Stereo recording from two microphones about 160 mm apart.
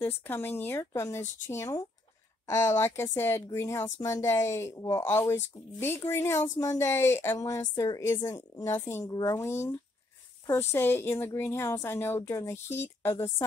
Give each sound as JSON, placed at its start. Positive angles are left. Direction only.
{"t": 0.0, "sound": "a woman's voice", "side_deg": 15}